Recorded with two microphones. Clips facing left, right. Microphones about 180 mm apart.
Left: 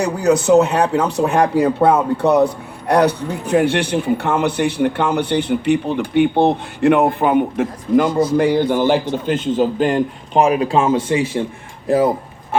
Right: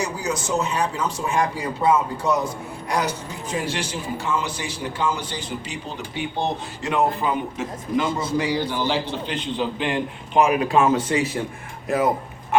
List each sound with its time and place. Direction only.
0.0 s a man's voice: 60° left (ahead or behind); by 12.1 s 30° left (ahead or behind)